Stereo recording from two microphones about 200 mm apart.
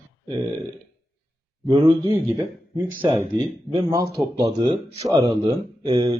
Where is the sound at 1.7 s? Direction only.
25° right (ahead or behind).